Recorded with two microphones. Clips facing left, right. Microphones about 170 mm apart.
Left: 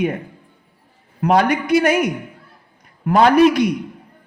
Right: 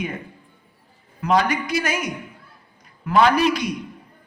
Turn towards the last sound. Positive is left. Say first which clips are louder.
# left 7 dB
turn(degrees=55)  # may be behind; listen again after turning